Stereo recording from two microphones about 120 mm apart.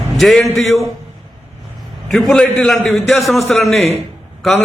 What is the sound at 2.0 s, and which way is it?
A man's voice, 5° left (ahead or behind).